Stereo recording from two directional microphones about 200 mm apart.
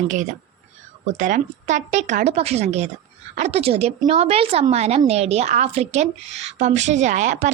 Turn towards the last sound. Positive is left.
turn(degrees=-35)  # may be behind; listen again after turning